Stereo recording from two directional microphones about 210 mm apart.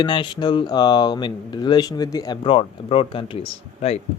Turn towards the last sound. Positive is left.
turn(degrees=30)  # may be behind; listen again after turning